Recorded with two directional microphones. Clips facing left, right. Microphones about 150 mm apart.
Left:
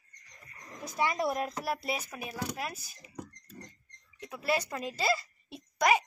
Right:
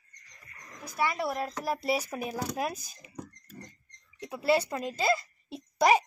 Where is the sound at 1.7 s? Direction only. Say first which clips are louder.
Right 6 dB; 5° right (ahead or behind).